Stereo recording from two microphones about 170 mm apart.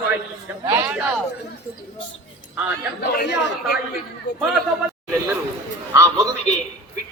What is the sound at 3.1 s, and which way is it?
A woman's voice, 70° left (ahead or behind).